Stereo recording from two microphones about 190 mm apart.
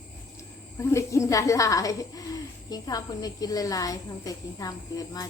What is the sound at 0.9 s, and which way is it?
A woman's voice, 15° left (ahead or behind).